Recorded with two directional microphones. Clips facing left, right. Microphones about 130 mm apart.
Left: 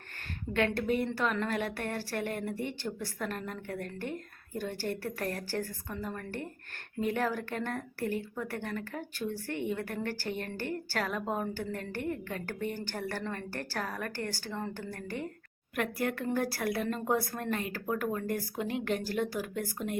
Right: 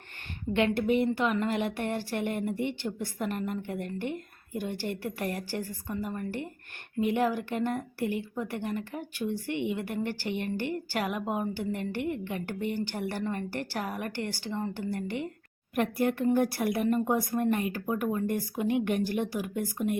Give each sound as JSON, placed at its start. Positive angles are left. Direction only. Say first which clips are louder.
{"t": 0.5, "sound": "a woman's voice", "louder": "right 4 dB", "side_deg": -15}